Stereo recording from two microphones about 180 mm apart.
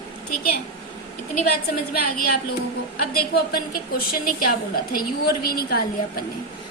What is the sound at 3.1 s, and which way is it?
A woman's voice, 55° left (ahead or behind).